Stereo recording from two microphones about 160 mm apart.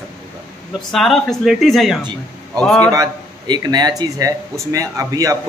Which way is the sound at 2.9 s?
25° right (ahead or behind).